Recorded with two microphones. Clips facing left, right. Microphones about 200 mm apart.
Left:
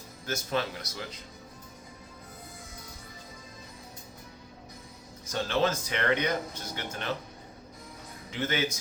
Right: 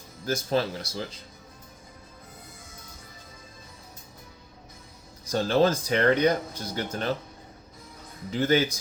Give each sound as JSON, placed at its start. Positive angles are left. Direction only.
{"t": 0.3, "sound": "speech", "side_deg": -35}
{"t": 5.3, "sound": "speech", "side_deg": -35}
{"t": 8.3, "sound": "speech", "side_deg": -35}